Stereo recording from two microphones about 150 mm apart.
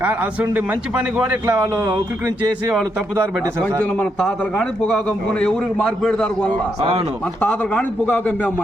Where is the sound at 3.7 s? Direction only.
15° left (ahead or behind).